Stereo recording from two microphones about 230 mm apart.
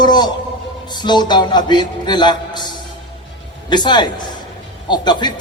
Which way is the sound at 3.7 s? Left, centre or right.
Centre.